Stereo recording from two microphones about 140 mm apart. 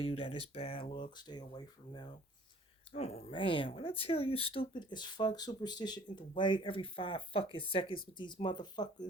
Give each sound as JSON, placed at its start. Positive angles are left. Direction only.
{"t": 0.0, "sound": "speech", "side_deg": 45}
{"t": 2.9, "sound": "speech", "side_deg": 45}